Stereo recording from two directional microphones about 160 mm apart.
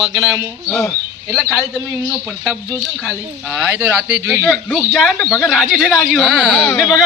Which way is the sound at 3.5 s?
10° right (ahead or behind).